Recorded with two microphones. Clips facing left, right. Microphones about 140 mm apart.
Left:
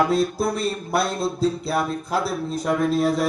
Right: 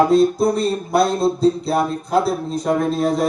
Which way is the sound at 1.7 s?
35° right (ahead or behind).